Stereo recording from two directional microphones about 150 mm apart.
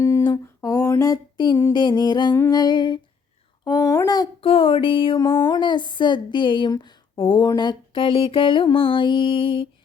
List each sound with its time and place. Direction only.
0.0 s a sound: 20° left (ahead or behind)
2.4 s a child's voice: 25° left (ahead or behind)
4.4 s speech: 40° left (ahead or behind)